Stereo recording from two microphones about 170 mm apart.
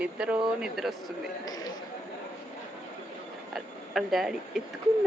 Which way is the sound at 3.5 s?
Centre (ahead or behind).